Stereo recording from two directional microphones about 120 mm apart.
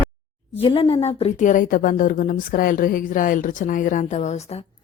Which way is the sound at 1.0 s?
55° left (ahead or behind).